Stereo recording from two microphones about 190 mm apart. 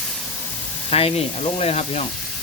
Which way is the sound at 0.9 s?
30° left (ahead or behind).